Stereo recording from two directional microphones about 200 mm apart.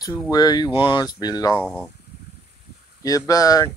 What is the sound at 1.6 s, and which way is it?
Speech, centre (ahead or behind).